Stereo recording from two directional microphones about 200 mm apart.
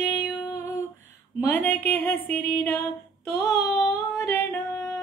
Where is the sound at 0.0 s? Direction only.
10° left (ahead or behind).